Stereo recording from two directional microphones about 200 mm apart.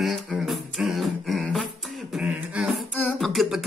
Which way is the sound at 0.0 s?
Centre (ahead or behind).